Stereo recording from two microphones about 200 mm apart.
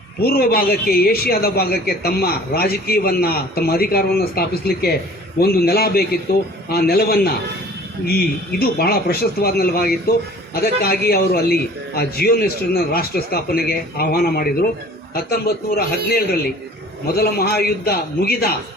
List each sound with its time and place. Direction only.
0.2 s a man's voice: 50° left (ahead or behind)
15.9 s a man's voice: 50° left (ahead or behind)